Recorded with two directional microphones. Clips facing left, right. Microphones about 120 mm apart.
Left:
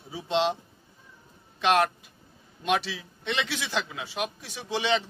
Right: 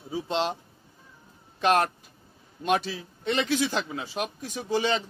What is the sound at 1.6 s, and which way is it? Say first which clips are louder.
Speech: even; 40° right (ahead or behind).